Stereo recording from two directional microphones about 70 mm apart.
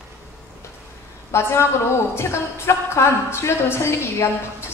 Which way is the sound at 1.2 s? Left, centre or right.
Left.